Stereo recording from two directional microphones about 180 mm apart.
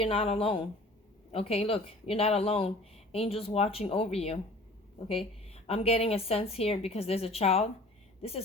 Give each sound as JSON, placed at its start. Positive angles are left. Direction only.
{"t": 0.0, "sound": "speech", "side_deg": 30}
{"t": 5.6, "sound": "speech", "side_deg": 35}